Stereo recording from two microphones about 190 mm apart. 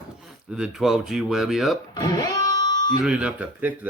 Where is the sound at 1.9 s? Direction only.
20° left (ahead or behind).